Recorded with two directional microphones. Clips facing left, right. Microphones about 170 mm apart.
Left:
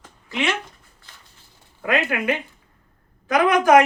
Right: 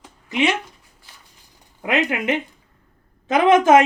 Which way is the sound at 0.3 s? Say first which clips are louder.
Right 4 dB; 20° right (ahead or behind).